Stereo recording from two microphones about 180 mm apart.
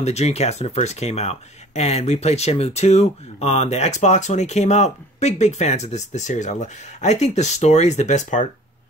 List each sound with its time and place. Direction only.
0.0 s speech: 35° left (ahead or behind)